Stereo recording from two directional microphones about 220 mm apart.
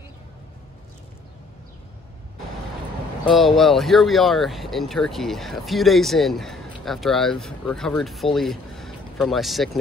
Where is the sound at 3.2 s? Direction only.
Centre (ahead or behind).